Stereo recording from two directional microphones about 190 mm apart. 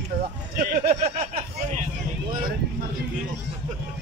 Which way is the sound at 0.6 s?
45° right (ahead or behind).